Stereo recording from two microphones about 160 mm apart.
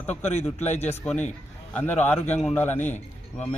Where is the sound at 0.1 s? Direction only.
45° left (ahead or behind).